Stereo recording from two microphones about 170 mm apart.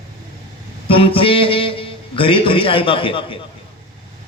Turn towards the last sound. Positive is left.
turn(degrees=30)  # may be behind; listen again after turning